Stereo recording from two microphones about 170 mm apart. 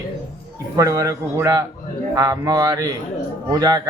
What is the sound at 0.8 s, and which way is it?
A man's voice, 20° right (ahead or behind).